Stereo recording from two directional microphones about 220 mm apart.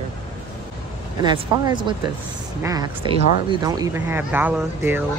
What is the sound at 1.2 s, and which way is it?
Speech, 20° right (ahead or behind).